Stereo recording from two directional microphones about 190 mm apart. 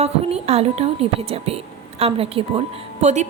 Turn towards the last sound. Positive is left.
turn(degrees=-40)  # may be behind; listen again after turning